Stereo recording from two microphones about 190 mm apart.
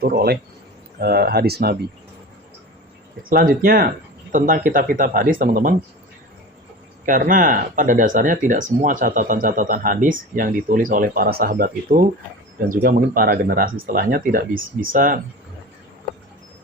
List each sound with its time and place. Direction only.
0.0 s speech: 55° right (ahead or behind)
3.2 s speech: 50° right (ahead or behind)
7.0 s speech: 45° right (ahead or behind)